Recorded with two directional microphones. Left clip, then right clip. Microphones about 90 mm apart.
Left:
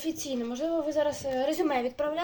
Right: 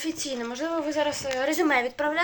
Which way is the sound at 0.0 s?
25° left (ahead or behind).